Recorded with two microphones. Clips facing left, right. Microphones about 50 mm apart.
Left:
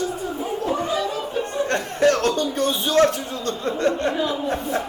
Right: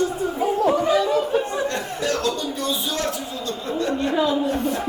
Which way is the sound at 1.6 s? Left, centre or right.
Left.